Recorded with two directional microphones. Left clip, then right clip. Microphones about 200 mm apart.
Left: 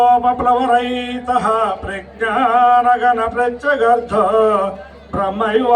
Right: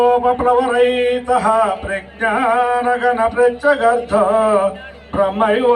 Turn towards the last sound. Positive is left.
turn(degrees=30)  # may be behind; listen again after turning